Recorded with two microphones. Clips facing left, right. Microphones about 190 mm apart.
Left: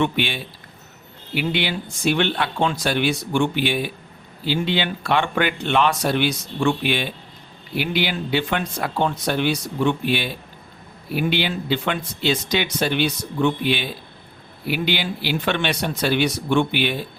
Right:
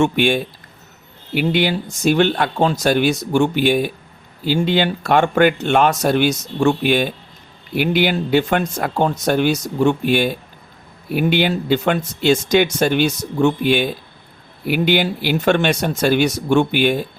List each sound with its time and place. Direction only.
0.0 s speech: 45° right (ahead or behind)